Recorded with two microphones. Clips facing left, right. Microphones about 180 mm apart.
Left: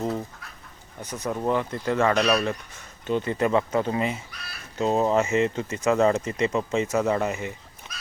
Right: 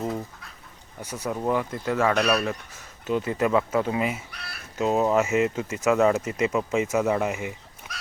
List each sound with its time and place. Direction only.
1.0 s speech: 10° right (ahead or behind)
4.3 s speech: 65° right (ahead or behind)
4.8 s speech: 5° right (ahead or behind)
7.9 s goose: 10° right (ahead or behind)